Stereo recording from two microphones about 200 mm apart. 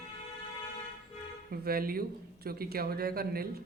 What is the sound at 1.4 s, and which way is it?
Speech, 50° right (ahead or behind).